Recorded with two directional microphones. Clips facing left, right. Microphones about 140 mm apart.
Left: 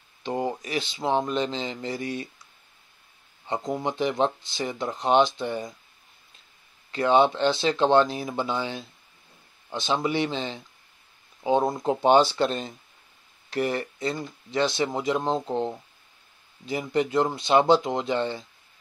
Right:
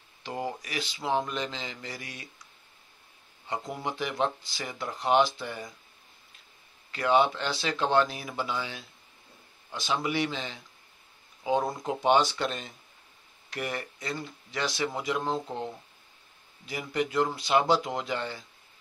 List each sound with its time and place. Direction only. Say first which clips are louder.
0.2 s speech: left 6 dB; 25° left (ahead or behind)
3.8 s speech: left 5 dB; 25° left (ahead or behind)
6.9 s speech: left 4 dB; 25° left (ahead or behind)